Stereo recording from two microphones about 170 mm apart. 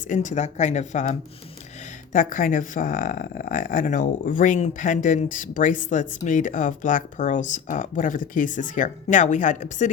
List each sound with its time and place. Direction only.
0.1 s speech: 45° left (ahead or behind)
2.1 s speech: 50° left (ahead or behind)